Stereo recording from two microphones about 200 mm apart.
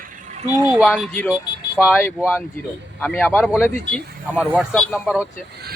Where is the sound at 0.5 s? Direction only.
15° right (ahead or behind).